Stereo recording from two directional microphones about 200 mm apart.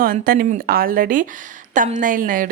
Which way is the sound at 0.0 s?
45° right (ahead or behind).